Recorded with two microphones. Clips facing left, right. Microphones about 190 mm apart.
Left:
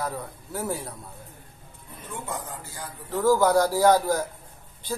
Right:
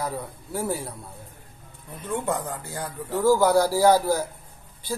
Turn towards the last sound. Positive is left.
turn(degrees=-10)  # may be behind; listen again after turning